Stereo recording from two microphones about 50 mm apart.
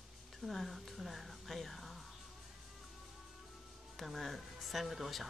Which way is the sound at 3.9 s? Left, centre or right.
Centre.